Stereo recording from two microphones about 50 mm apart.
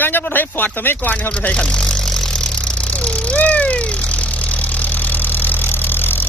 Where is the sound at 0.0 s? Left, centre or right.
Left.